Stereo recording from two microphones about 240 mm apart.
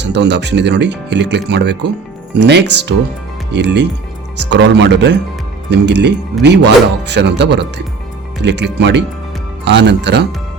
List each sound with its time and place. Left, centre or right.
0.0 s speech: right